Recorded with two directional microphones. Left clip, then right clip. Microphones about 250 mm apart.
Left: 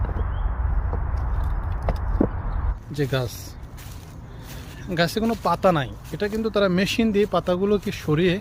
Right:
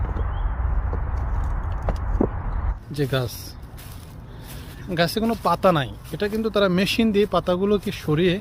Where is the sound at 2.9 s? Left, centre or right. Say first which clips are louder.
Right 1 dB; centre.